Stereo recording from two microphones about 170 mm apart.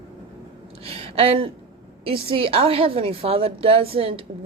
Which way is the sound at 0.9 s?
35° right (ahead or behind).